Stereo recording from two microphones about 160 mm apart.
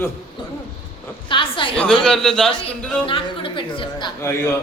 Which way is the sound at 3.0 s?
35° left (ahead or behind).